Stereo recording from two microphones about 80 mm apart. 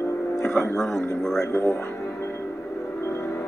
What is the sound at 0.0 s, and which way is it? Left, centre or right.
Music, left.